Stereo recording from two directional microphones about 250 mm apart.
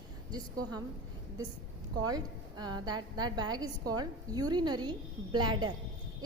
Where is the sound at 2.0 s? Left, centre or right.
Centre.